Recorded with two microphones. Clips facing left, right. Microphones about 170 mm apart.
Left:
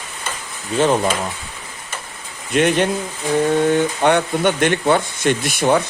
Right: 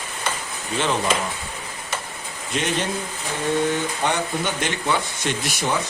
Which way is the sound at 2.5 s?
60° left (ahead or behind).